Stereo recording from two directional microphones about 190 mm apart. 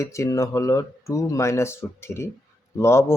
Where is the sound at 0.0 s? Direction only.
15° left (ahead or behind).